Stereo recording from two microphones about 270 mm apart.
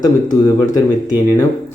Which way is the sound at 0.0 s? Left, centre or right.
Centre.